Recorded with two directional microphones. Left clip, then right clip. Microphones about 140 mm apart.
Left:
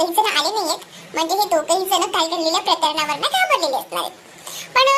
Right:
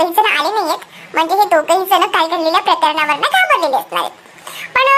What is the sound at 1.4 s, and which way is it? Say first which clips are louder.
A child's voice: right 6 dB; 5° right (ahead or behind).